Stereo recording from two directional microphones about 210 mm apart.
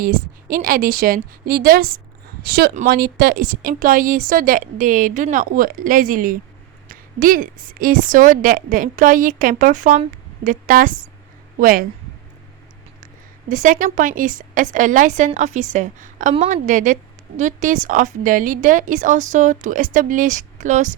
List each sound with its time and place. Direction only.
0.0 s a woman's voice: 40° right (ahead or behind)
13.5 s a woman's voice: 40° right (ahead or behind)